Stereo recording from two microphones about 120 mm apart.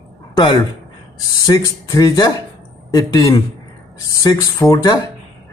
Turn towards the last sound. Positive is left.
turn(degrees=35)  # may be behind; listen again after turning